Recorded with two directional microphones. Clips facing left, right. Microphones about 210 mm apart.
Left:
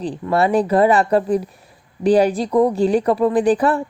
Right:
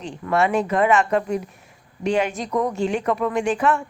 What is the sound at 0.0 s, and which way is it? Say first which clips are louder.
Speech: left 3 dB; 35° left (ahead or behind).